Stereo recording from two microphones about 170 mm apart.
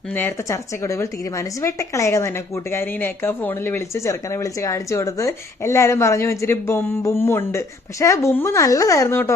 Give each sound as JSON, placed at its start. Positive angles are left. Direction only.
{"t": 0.2, "sound": "speech", "side_deg": 15}